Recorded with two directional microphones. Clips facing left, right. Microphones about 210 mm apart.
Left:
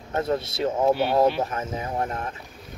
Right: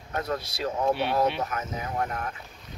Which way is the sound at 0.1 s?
25° left (ahead or behind).